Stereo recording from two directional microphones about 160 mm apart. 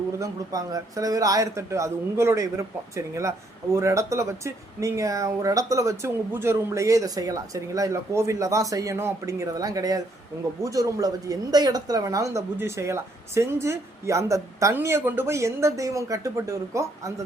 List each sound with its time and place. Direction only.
0.2 s a woman's voice: 20° right (ahead or behind)